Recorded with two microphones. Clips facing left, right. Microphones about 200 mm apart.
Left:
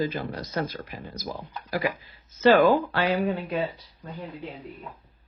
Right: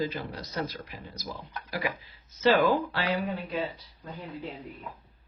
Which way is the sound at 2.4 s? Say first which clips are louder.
Left 5 dB; 55° left (ahead or behind).